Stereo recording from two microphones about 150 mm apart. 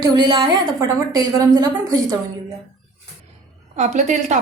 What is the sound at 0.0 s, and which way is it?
A woman's voice, 30° right (ahead or behind).